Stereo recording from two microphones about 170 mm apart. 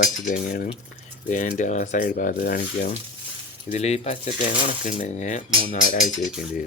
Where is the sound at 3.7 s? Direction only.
40° left (ahead or behind).